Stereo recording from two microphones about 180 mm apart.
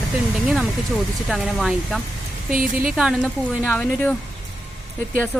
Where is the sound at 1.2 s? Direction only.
Centre (ahead or behind).